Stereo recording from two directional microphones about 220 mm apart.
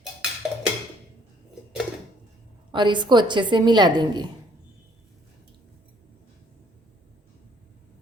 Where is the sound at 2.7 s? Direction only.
20° right (ahead or behind).